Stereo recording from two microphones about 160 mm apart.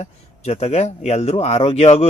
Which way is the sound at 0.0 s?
40° left (ahead or behind).